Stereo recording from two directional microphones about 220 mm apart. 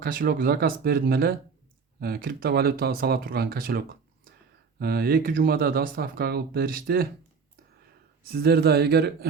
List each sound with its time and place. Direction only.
0.0 s speech: 40° right (ahead or behind)
8.2 s speech: 45° right (ahead or behind)